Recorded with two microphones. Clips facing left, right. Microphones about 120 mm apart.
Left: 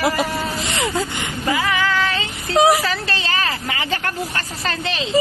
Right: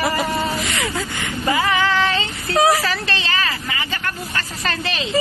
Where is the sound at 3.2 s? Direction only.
35° left (ahead or behind).